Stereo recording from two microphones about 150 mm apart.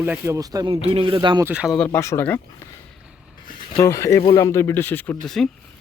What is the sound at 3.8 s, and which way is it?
Speech, 20° left (ahead or behind).